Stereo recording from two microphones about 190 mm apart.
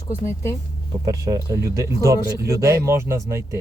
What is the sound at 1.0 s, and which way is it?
Speech, 15° right (ahead or behind).